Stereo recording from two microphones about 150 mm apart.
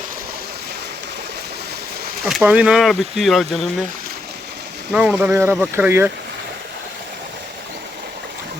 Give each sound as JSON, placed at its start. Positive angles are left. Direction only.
{"t": 2.4, "sound": "speech", "side_deg": -10}
{"t": 4.9, "sound": "speech", "side_deg": -10}